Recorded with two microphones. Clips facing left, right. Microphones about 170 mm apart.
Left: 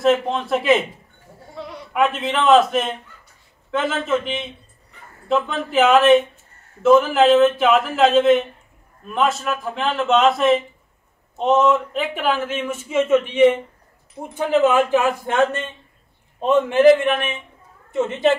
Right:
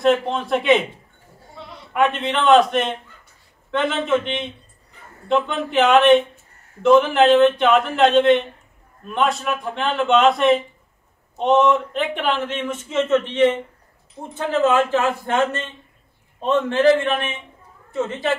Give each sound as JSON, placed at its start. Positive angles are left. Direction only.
{"t": 0.0, "sound": "speech", "side_deg": 0}
{"t": 2.0, "sound": "a man's voice", "side_deg": 0}
{"t": 16.4, "sound": "a man's voice", "side_deg": 15}